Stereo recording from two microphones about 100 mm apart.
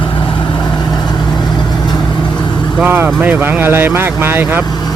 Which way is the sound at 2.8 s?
20° right (ahead or behind).